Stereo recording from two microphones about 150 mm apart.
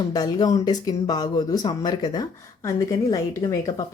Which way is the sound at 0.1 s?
30° left (ahead or behind).